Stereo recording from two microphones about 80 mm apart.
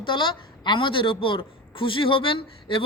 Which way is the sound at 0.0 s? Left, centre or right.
Left.